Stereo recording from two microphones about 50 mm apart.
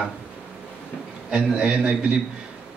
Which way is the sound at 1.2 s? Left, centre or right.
Centre.